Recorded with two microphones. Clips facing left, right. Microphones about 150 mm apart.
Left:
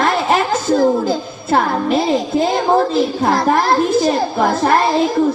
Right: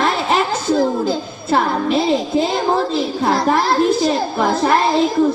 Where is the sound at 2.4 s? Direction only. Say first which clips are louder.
Left 3 dB; 45° left (ahead or behind).